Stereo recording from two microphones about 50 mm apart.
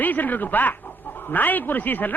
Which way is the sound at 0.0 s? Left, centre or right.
Left.